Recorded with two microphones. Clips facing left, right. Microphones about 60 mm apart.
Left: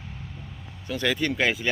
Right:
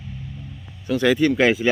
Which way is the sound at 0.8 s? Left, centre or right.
Centre.